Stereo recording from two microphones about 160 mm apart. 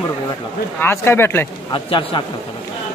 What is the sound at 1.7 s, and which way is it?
Speech, 30° left (ahead or behind).